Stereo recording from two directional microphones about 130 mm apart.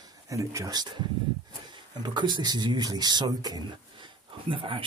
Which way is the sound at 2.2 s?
35° right (ahead or behind).